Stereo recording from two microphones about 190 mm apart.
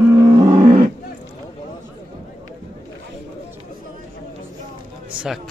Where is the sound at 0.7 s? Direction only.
45° right (ahead or behind).